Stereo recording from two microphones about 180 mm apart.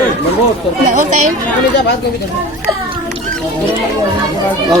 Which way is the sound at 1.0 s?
45° right (ahead or behind).